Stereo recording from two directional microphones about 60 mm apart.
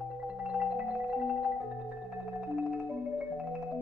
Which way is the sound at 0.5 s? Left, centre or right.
Centre.